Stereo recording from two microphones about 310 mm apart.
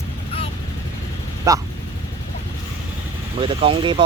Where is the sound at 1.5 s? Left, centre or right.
Centre.